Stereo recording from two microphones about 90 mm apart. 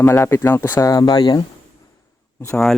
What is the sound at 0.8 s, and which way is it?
Speech, 45° left (ahead or behind).